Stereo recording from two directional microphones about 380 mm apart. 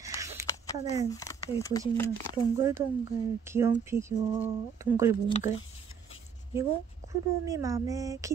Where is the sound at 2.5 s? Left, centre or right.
Centre.